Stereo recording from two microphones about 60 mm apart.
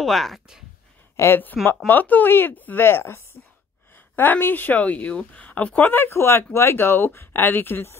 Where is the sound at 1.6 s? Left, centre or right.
Centre.